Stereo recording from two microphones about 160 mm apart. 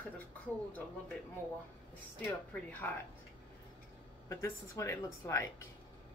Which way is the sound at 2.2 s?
10° left (ahead or behind).